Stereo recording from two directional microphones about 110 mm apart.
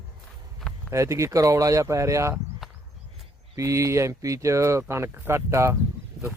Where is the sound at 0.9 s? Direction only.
25° right (ahead or behind).